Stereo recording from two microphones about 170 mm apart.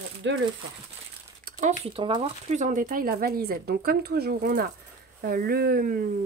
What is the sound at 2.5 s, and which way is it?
Speech, 45° right (ahead or behind).